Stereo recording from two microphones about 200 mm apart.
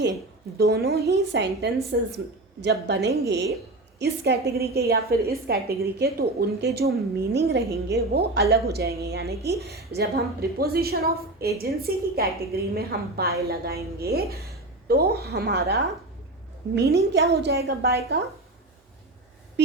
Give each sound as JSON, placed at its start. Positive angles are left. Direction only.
{"t": 0.6, "sound": "a woman's voice", "side_deg": -55}
{"t": 7.6, "sound": "a woman's voice", "side_deg": -15}
{"t": 7.9, "sound": "a woman's voice", "side_deg": -55}
{"t": 19.6, "sound": "a sound", "side_deg": -60}